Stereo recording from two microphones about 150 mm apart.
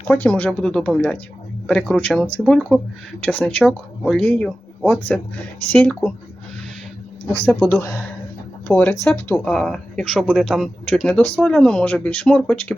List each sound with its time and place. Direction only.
0.1 s speech: 10° left (ahead or behind)
7.7 s speech: 15° left (ahead or behind)